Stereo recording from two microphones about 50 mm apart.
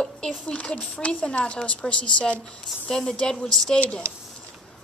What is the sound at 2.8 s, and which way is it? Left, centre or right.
Speech, centre.